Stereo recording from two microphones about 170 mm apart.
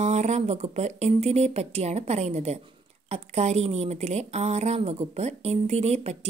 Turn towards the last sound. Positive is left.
turn(degrees=-40)  # may be behind; listen again after turning